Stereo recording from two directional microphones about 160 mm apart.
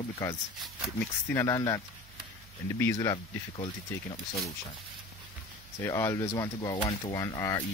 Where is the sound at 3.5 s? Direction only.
35° left (ahead or behind).